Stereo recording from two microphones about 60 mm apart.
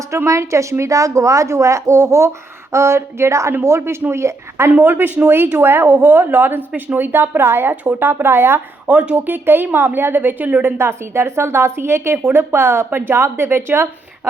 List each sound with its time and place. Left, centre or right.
0.3 s a woman's voice: right
4.7 s speech: right
8.9 s speech: right
10.8 s a woman's voice: right